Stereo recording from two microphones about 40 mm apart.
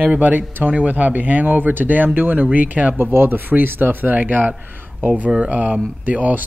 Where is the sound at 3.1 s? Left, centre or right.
Right.